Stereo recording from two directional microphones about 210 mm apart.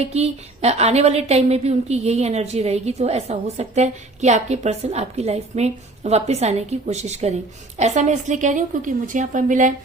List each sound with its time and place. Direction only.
0.1 s a woman's voice: 30° right (ahead or behind)